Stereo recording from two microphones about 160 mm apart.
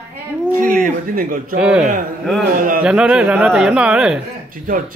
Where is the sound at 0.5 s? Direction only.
55° right (ahead or behind).